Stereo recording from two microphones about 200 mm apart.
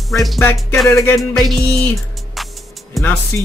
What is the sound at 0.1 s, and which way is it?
Music, centre (ahead or behind).